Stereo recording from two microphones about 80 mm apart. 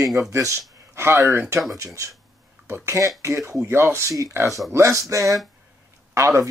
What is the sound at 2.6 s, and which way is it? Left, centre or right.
Speech, right.